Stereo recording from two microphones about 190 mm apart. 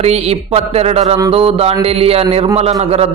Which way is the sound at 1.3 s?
30° right (ahead or behind).